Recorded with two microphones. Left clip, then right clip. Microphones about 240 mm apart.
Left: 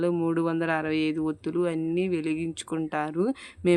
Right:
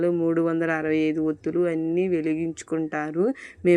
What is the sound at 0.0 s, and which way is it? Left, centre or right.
Speech, centre.